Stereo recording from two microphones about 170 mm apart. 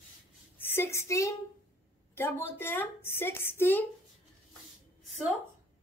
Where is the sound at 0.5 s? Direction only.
15° left (ahead or behind).